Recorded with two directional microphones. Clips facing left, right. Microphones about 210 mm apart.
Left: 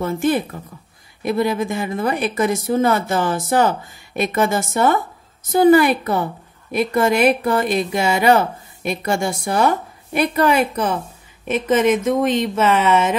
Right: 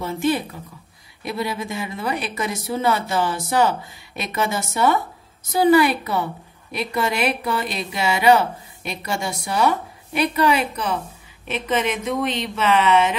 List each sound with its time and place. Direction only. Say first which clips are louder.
0.0 s speech: left 3 dB; 50° left (ahead or behind)